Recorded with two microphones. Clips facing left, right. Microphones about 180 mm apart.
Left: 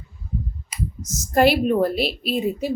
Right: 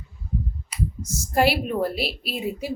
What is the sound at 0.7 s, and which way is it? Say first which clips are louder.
Clicking: right 1 dB; 40° left (ahead or behind).